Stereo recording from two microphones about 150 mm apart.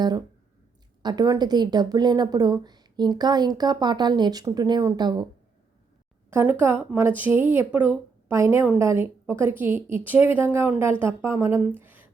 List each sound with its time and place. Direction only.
0.0 s a woman's voice: 25° right (ahead or behind)
6.3 s a woman's voice: 15° right (ahead or behind)
11.7 s a sound: 15° right (ahead or behind)